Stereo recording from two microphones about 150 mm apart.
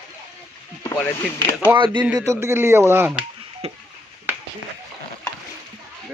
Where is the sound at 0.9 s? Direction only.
20° left (ahead or behind).